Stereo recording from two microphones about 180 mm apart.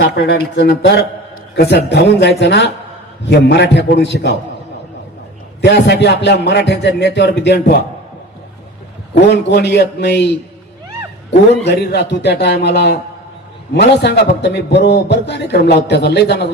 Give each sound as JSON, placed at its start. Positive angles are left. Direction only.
{"t": 0.1, "sound": "a man's voice", "side_deg": 65}
{"t": 5.6, "sound": "a man's voice", "side_deg": 65}
{"t": 9.3, "sound": "a man's voice", "side_deg": 70}
{"t": 11.7, "sound": "a man's voice", "side_deg": 65}